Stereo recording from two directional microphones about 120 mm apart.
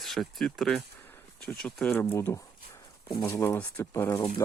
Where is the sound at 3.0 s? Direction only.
40° left (ahead or behind).